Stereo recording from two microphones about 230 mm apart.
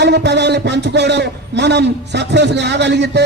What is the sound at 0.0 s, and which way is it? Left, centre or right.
A man's voice, right.